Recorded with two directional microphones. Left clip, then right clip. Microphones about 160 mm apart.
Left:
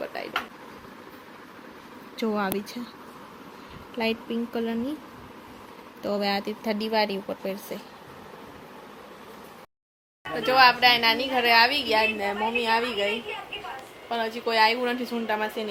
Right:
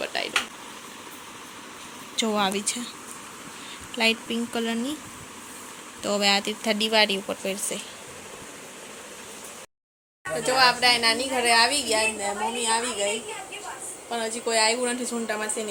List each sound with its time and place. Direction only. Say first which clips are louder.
0.0 s a sound: right 5 dB; centre (ahead or behind)
2.1 s speech: right 3 dB; centre (ahead or behind)
3.9 s speech: right 4 dB; 5° right (ahead or behind)
6.0 s speech: right 4 dB; 5° right (ahead or behind)
10.3 s speech: left 2 dB; 5° left (ahead or behind)
12.2 s speech: left 1 dB; 40° left (ahead or behind)
14.1 s speech: even; 5° left (ahead or behind)